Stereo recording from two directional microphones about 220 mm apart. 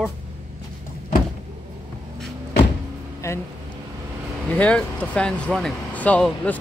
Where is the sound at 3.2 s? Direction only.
10° left (ahead or behind).